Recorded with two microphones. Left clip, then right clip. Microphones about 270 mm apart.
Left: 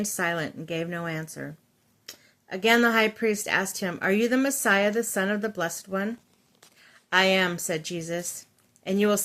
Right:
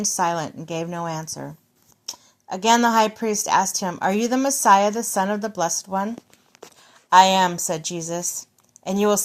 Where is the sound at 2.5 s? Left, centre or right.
Right.